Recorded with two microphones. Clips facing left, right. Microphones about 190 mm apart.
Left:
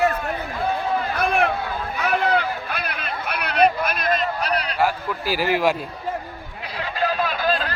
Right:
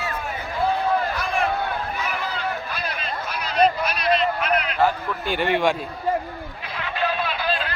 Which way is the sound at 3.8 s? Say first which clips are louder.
Right 1 dB; 50° left (ahead or behind).